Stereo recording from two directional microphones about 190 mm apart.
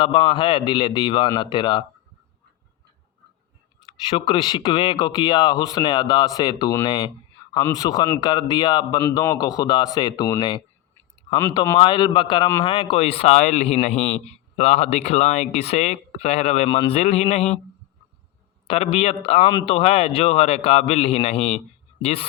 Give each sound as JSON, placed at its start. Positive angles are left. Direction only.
{"t": 0.0, "sound": "speech", "side_deg": 25}
{"t": 3.8, "sound": "a man's voice", "side_deg": 25}
{"t": 18.7, "sound": "a man's voice", "side_deg": 30}